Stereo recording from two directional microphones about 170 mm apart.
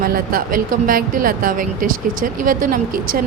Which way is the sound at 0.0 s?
60° right (ahead or behind).